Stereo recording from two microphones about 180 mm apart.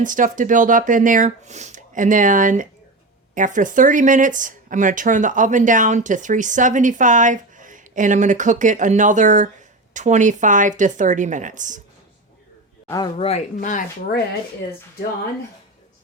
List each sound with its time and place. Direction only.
0.0 s speech: 45° right (ahead or behind)
12.9 s speech: 25° left (ahead or behind); by 14.2 s 45° left (ahead or behind)